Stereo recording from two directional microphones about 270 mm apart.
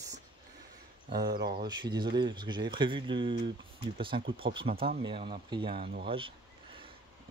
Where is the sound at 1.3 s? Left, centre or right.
Right.